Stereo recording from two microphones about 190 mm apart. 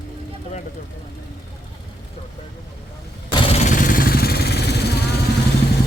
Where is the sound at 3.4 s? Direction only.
35° left (ahead or behind); by 4.8 s 60° left (ahead or behind).